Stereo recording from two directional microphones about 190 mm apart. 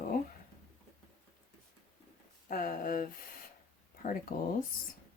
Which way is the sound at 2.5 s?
50° left (ahead or behind).